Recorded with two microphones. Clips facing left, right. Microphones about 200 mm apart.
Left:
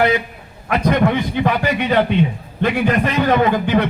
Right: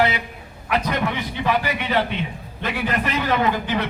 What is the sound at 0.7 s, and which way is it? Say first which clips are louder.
A man's voice: left 7 dB; 50° left (ahead or behind).